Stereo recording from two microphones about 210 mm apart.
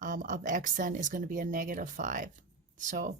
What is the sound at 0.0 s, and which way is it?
Speech, 35° right (ahead or behind).